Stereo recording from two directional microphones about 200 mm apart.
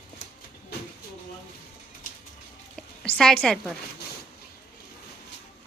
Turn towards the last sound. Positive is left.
turn(degrees=5)  # may be behind; listen again after turning